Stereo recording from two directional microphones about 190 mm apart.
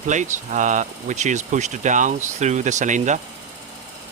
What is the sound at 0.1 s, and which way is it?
Speech, 40° right (ahead or behind).